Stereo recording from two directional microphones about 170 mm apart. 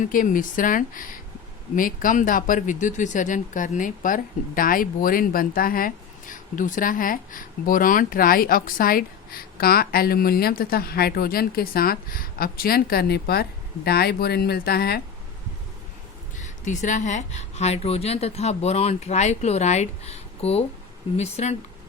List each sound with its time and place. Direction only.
0.0 s speech: 50° left (ahead or behind)
16.6 s a woman's voice: 45° left (ahead or behind)